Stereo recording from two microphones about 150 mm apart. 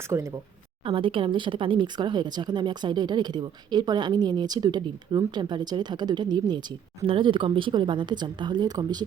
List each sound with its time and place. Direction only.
0.1 s speech: 20° right (ahead or behind)
0.9 s speech: 35° right (ahead or behind)